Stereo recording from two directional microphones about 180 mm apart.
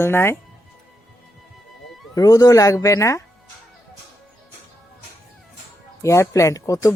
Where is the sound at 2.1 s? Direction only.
20° left (ahead or behind).